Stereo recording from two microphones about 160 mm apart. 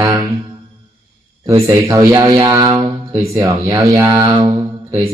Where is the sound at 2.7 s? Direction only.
35° right (ahead or behind).